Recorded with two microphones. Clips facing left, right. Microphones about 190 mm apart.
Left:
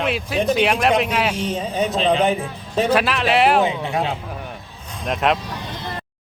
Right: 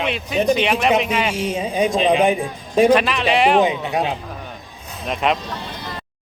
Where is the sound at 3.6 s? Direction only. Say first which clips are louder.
Right 2 dB; 15° right (ahead or behind).